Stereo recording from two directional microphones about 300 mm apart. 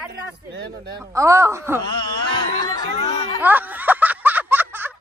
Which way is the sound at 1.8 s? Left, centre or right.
Centre.